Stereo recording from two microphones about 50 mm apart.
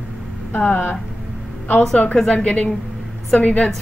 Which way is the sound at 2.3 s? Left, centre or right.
Left.